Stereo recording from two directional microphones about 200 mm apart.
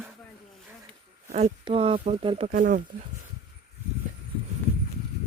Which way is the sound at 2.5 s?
40° right (ahead or behind).